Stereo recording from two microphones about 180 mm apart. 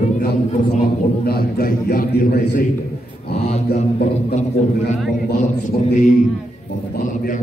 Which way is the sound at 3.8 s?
40° left (ahead or behind).